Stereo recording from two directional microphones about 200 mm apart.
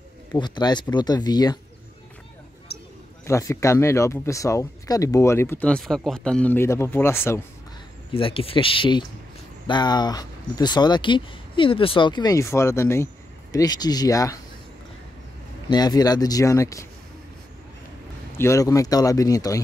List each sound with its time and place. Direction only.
0.3 s speech: 20° left (ahead or behind)
2.7 s a sound: 55° left (ahead or behind)
3.3 s speech: 15° left (ahead or behind)
8.1 s speech: 25° left (ahead or behind)
15.7 s speech: 20° left (ahead or behind)
18.4 s speech: 15° left (ahead or behind)